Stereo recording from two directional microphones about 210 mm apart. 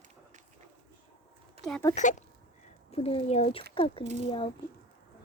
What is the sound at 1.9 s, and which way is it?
Speech, 35° left (ahead or behind).